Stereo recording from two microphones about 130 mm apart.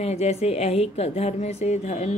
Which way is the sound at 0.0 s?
55° left (ahead or behind).